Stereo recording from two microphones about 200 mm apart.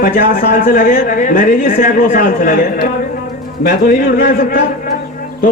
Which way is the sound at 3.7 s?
50° left (ahead or behind).